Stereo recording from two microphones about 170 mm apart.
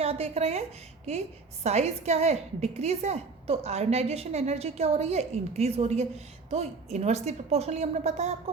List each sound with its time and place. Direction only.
0.0 s a woman's voice: 35° right (ahead or behind)